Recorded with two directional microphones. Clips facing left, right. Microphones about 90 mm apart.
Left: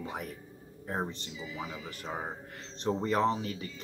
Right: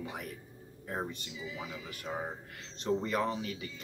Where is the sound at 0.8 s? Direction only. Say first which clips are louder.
Left 3 dB; 30° left (ahead or behind).